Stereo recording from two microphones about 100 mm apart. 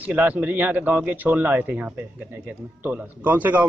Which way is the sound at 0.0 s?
15° right (ahead or behind).